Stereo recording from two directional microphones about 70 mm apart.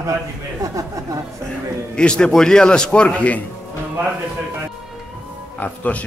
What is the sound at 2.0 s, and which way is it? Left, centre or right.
A man's voice, centre.